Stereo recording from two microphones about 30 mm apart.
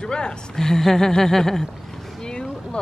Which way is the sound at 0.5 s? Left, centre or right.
Centre.